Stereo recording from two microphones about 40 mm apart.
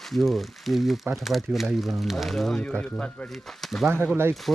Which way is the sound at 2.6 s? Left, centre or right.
Left.